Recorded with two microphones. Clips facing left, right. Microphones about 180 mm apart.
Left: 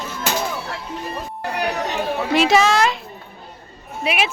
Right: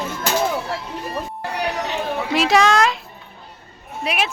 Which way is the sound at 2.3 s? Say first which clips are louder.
Even; centre (ahead or behind).